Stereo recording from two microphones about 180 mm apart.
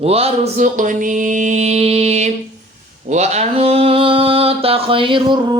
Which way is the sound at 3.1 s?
40° right (ahead or behind).